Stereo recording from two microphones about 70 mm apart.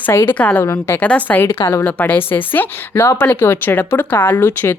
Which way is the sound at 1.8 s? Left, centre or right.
Left.